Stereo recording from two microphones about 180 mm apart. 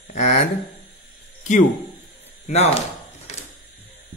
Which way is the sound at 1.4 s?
40° left (ahead or behind).